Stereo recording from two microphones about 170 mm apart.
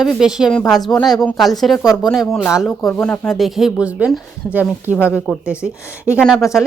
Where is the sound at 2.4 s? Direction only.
15° left (ahead or behind).